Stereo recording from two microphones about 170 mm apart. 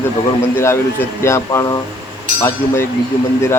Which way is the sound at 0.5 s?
15° left (ahead or behind).